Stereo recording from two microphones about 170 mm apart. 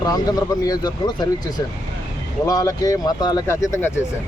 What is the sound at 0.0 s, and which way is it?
Speech, 20° left (ahead or behind).